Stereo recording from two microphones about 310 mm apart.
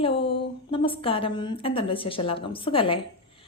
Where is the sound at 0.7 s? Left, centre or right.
Centre.